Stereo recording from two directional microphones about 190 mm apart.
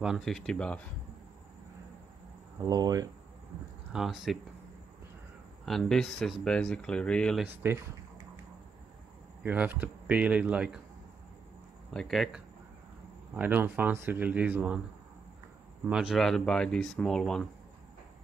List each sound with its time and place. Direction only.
0.0 s speech: centre (ahead or behind)
2.6 s speech: 20° right (ahead or behind)
3.9 s speech: centre (ahead or behind)
5.7 s speech: centre (ahead or behind)
7.4 s speech: 10° right (ahead or behind)
9.4 s speech: 10° right (ahead or behind)
11.9 s speech: centre (ahead or behind)
13.4 s speech: 10° right (ahead or behind)
15.9 s speech: 5° right (ahead or behind)